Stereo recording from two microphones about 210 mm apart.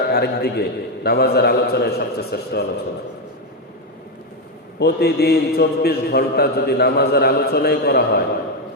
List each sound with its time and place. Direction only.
0.1 s a man's voice: 50° left (ahead or behind)
4.8 s a man's voice: 50° left (ahead or behind)